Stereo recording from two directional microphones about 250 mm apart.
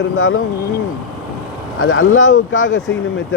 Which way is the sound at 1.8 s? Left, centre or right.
Left.